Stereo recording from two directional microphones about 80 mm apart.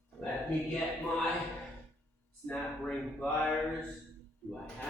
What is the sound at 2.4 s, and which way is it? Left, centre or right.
Speech, centre.